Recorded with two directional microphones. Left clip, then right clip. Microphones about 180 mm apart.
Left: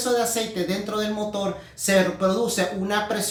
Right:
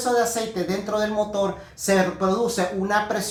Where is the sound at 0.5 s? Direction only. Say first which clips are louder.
Right 2 dB; 15° left (ahead or behind).